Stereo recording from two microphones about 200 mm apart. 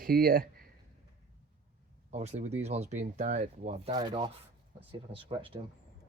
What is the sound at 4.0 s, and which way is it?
Speech, 20° right (ahead or behind).